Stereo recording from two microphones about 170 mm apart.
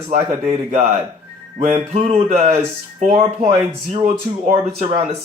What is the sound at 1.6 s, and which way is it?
Music, 45° right (ahead or behind).